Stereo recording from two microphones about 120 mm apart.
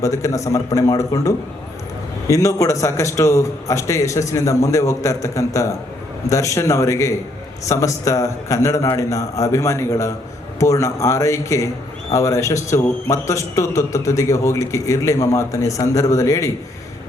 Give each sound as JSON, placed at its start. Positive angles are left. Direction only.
{"t": 0.0, "sound": "a man's voice", "side_deg": 25}